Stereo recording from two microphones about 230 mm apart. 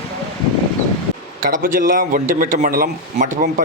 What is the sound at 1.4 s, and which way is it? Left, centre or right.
A man's voice, right.